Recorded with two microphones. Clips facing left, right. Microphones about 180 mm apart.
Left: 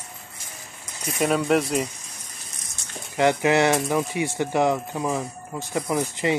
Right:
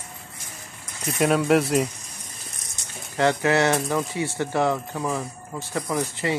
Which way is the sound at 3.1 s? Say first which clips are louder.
Left 1 dB; 15° left (ahead or behind).